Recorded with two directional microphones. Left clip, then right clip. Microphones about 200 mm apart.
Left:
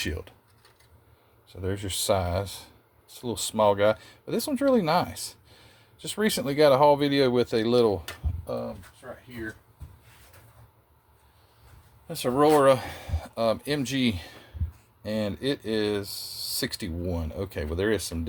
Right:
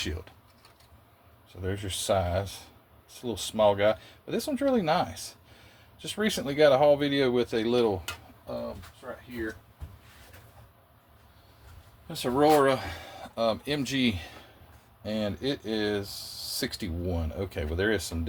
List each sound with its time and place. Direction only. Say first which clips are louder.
0.0 s speech: left 3 dB; 40° left (ahead or behind)
1.6 s speech: left 3 dB; 35° left (ahead or behind)
12.0 s speech: left 1 dB; 35° left (ahead or behind)